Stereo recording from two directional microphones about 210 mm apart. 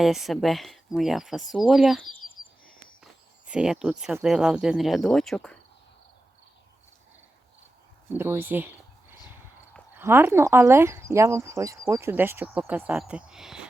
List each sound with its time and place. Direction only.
0.0 s speech: centre (ahead or behind)
2.1 s a sound: 40° left (ahead or behind)
3.0 s speech: 5° right (ahead or behind)
8.1 s speech: 10° right (ahead or behind)
10.0 s speech: 10° right (ahead or behind)